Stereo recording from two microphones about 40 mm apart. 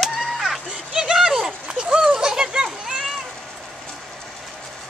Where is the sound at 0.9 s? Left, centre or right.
Centre.